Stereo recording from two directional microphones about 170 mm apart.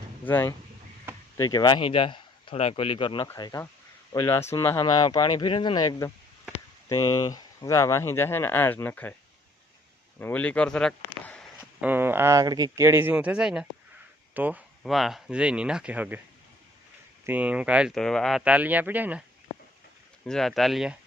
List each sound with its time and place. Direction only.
0.3 s speech: 10° left (ahead or behind)
1.4 s speech: 25° left (ahead or behind)
10.2 s speech: 10° left (ahead or behind)
11.8 s speech: 10° right (ahead or behind)
17.2 s speech: 10° right (ahead or behind)
20.2 s speech: centre (ahead or behind)